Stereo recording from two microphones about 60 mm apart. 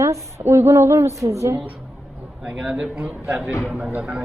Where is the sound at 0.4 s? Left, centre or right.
Right.